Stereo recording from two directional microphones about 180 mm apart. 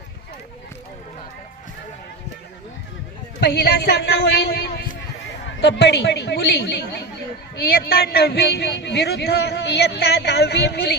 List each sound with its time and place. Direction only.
3.4 s a man's voice: 60° left (ahead or behind)
5.6 s a man's voice: 70° left (ahead or behind)
7.7 s a man's voice: 60° left (ahead or behind)